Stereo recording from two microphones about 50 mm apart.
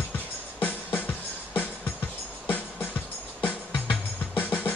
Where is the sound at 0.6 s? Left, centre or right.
Left.